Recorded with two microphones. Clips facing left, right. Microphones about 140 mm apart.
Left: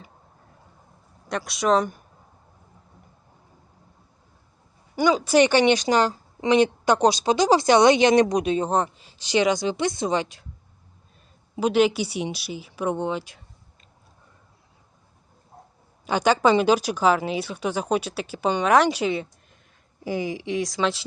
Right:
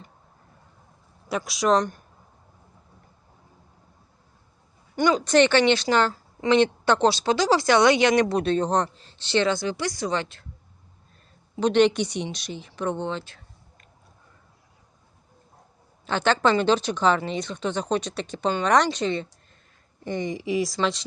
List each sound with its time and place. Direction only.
1.3 s speech: centre (ahead or behind)
4.9 s a woman's voice: 5° left (ahead or behind)
11.6 s a woman's voice: 5° left (ahead or behind)
16.0 s a woman's voice: 10° left (ahead or behind)